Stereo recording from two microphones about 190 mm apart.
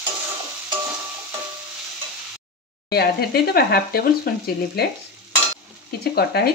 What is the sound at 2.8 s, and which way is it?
Speech, 55° left (ahead or behind).